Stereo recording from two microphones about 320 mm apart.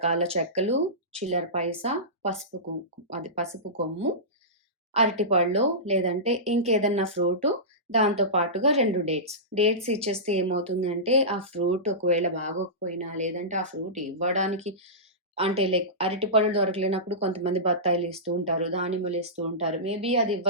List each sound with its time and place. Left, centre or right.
0.0 s speech: centre
3.5 s speech: centre